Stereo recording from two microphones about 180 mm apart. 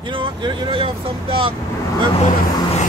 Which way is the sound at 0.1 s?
25° right (ahead or behind).